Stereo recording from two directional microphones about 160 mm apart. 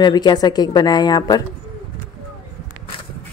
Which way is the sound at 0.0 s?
25° left (ahead or behind).